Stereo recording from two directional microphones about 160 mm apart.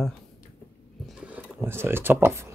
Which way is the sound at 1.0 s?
10° right (ahead or behind).